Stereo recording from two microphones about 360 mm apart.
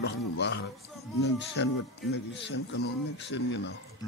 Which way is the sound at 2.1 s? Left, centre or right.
Left.